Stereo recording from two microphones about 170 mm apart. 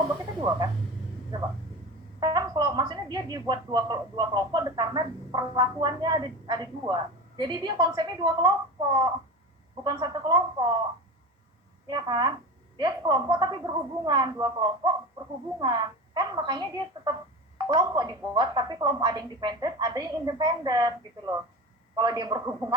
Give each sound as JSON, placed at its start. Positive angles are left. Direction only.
{"t": 1.3, "sound": "speech", "side_deg": -25}
{"t": 11.9, "sound": "speech", "side_deg": -25}